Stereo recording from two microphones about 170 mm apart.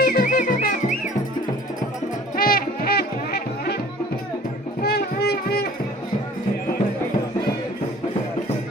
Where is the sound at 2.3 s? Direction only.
60° left (ahead or behind).